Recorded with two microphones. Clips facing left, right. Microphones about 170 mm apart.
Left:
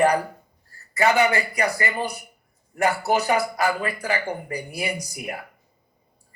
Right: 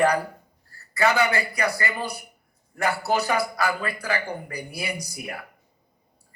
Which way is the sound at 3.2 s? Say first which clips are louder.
Left 2 dB; 25° left (ahead or behind).